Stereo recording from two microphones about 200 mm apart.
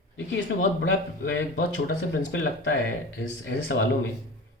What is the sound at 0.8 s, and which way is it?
A man's voice, 80° left.